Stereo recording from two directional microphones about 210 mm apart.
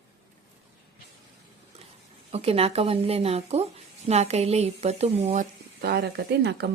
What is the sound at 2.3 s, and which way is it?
A woman's voice, 30° right (ahead or behind).